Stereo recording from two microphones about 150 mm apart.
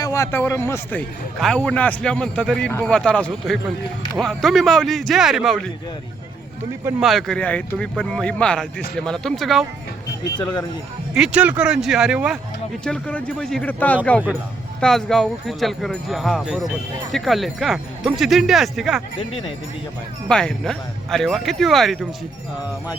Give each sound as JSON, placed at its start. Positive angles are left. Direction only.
{"t": 0.0, "sound": "a man's voice", "side_deg": 20}
{"t": 7.0, "sound": "a man's voice", "side_deg": 0}
{"t": 10.2, "sound": "speech", "side_deg": 25}
{"t": 11.1, "sound": "speech", "side_deg": -5}
{"t": 12.8, "sound": "a man's voice", "side_deg": 10}
{"t": 19.3, "sound": "speech", "side_deg": 40}
{"t": 20.2, "sound": "speech", "side_deg": 5}